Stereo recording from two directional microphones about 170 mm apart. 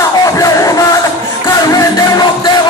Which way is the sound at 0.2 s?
20° left (ahead or behind).